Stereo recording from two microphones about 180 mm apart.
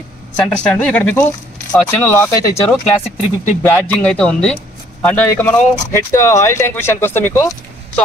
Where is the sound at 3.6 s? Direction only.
10° left (ahead or behind).